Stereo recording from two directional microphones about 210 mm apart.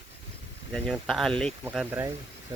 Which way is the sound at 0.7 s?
Centre (ahead or behind).